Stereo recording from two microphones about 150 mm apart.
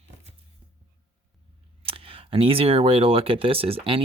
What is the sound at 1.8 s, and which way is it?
Speech, 40° right (ahead or behind).